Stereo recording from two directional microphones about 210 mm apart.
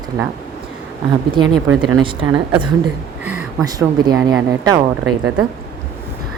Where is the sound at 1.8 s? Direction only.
20° right (ahead or behind).